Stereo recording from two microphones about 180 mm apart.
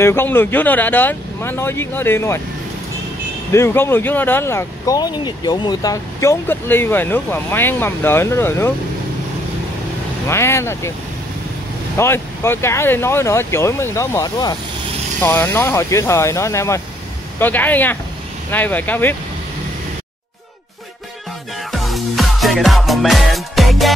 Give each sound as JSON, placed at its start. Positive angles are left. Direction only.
{"t": 0.0, "sound": "speech", "side_deg": 10}
{"t": 3.5, "sound": "speech", "side_deg": 15}
{"t": 10.2, "sound": "speech", "side_deg": 15}
{"t": 12.0, "sound": "speech", "side_deg": 15}
{"t": 15.1, "sound": "speech", "side_deg": 10}
{"t": 21.7, "sound": "music", "side_deg": 0}